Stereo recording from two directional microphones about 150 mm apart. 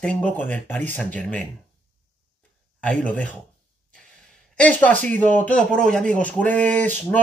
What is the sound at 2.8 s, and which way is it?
Speech, 10° left (ahead or behind).